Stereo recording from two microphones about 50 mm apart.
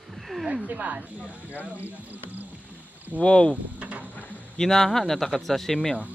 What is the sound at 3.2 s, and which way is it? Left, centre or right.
Speech, centre.